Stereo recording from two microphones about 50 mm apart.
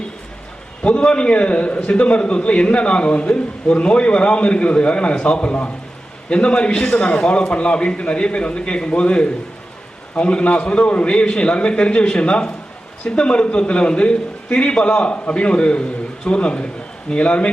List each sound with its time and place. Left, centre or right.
1.1 s a man's voice: left